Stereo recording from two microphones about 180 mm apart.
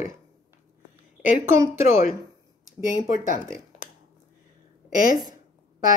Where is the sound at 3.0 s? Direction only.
50° left (ahead or behind).